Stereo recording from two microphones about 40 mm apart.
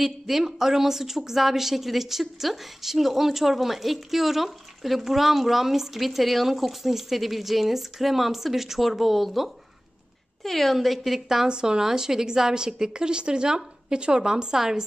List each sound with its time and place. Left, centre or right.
0.0 s a woman's voice: centre
11.4 s a woman's voice: centre